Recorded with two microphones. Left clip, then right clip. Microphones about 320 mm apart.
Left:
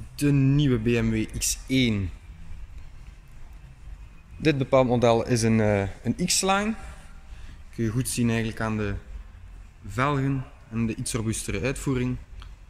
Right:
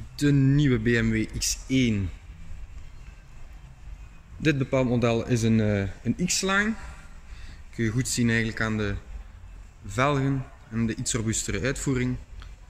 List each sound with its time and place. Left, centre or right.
0.1 s speech: centre
4.4 s speech: centre
7.7 s speech: centre